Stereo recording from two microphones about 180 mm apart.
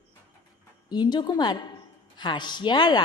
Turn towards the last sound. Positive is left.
turn(degrees=25)  # may be behind; listen again after turning